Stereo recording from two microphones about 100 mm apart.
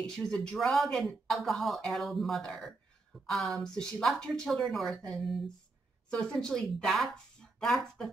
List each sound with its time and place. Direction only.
0.0 s a woman's voice: 10° left (ahead or behind)